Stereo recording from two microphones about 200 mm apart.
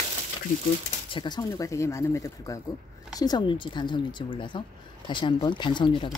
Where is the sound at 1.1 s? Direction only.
20° left (ahead or behind).